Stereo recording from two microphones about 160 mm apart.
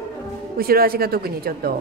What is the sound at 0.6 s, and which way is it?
A man's voice, 70° right (ahead or behind).